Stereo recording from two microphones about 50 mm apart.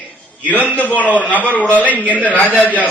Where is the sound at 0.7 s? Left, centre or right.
Left.